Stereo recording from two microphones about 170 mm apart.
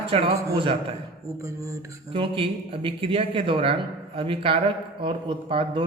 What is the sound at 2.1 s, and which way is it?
Speech, 30° right (ahead or behind).